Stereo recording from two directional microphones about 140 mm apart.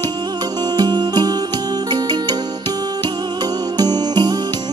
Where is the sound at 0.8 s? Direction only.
30° right (ahead or behind).